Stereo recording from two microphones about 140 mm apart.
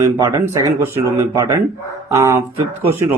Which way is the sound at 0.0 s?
25° right (ahead or behind).